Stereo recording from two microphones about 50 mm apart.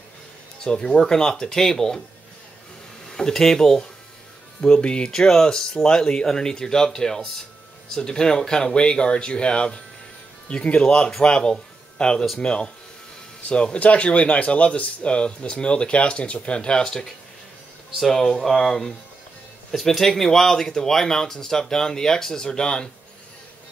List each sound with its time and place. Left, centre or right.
0.7 s speech: centre
3.1 s speech: centre
11.1 s speech: centre